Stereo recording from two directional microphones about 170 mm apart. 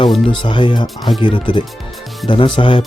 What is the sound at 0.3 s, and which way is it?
Speech, 30° left (ahead or behind).